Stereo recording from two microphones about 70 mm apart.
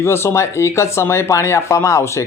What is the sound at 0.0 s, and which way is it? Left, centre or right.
Speech, left.